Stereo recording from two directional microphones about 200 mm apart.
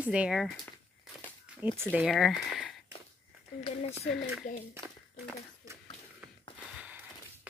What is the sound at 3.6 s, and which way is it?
Speech, 30° left (ahead or behind).